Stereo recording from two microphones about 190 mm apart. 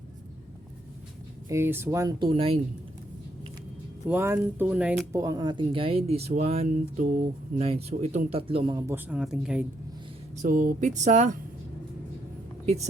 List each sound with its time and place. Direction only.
1.5 s speech: 15° right (ahead or behind); by 2.6 s 30° right (ahead or behind)
4.0 s speech: 10° right (ahead or behind)
9.0 s speech: 5° right (ahead or behind)
10.5 s speech: 45° right (ahead or behind)
12.6 s speech: 35° right (ahead or behind)